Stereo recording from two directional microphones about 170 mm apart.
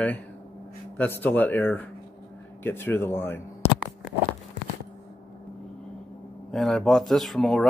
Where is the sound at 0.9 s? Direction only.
10° left (ahead or behind).